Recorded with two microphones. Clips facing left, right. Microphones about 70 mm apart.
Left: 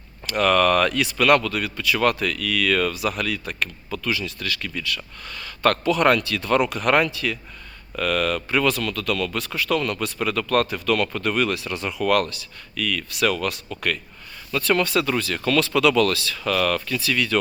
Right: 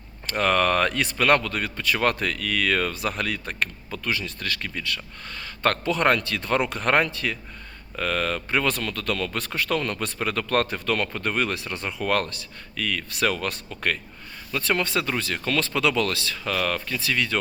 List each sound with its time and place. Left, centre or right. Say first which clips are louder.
0.3 s speech: left 3 dB; right
14.5 s speech: left 4 dB; right